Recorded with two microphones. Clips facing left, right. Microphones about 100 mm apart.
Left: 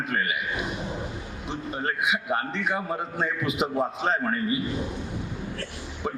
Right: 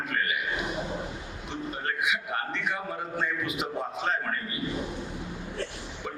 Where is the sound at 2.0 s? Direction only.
20° left (ahead or behind).